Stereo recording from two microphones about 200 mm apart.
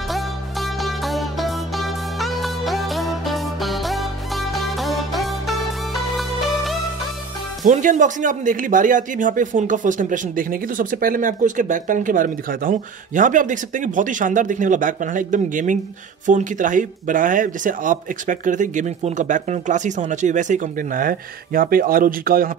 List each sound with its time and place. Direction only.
0.1 s music: centre (ahead or behind)
7.6 s speech: 40° right (ahead or behind)